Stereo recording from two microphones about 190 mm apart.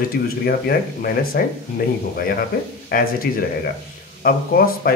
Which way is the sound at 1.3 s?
55° left (ahead or behind).